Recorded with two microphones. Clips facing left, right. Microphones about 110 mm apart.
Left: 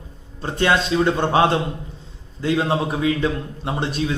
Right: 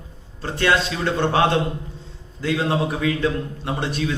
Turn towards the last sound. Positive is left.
turn(degrees=20)  # may be behind; listen again after turning